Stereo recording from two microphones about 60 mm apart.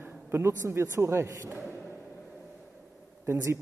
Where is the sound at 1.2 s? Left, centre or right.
Right.